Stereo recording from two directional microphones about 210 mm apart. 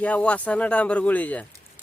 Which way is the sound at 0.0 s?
5° left (ahead or behind).